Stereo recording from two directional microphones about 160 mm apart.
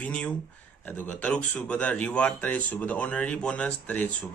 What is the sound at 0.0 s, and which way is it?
Speech, 5° left (ahead or behind).